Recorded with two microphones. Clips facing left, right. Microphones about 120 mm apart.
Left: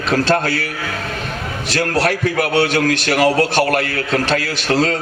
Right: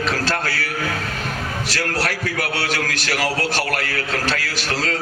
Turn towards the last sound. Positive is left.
turn(degrees=25)  # may be behind; listen again after turning